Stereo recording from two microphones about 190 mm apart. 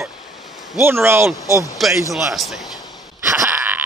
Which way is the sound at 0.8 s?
10° right (ahead or behind).